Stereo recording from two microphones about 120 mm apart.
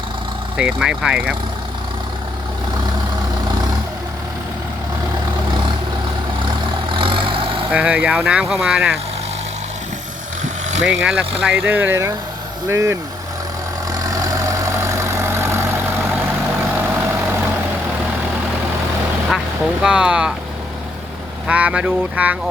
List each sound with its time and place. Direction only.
0.5 s speech: 10° right (ahead or behind)
6.8 s vehicle: 45° right (ahead or behind)
7.7 s speech: 10° right (ahead or behind)
10.4 s vehicle: 75° right (ahead or behind)
10.8 s speech: 5° right (ahead or behind); by 13.0 s 25° right (ahead or behind)
13.9 s vehicle: 30° right (ahead or behind)
19.8 s speech: 5° right (ahead or behind)
21.4 s speech: 10° right (ahead or behind)